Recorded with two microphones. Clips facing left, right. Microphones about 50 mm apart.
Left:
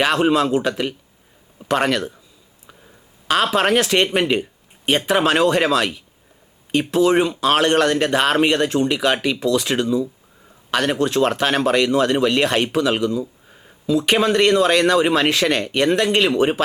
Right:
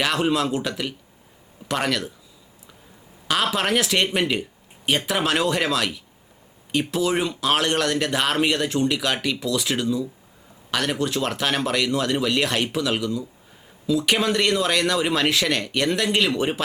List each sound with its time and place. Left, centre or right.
0.0 s speech: centre
3.2 s speech: centre
11.3 s speech: left